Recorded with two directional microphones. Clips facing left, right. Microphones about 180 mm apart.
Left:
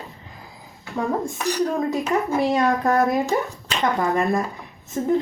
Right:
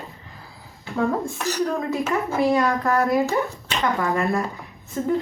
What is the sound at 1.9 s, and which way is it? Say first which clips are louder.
A woman's voice: left 2 dB; 15° left (ahead or behind).